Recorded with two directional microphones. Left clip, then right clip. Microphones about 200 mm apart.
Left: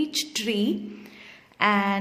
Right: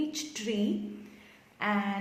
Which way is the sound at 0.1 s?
40° left (ahead or behind).